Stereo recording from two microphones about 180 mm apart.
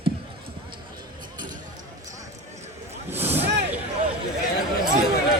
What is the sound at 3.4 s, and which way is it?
Vehicle, 70° right (ahead or behind).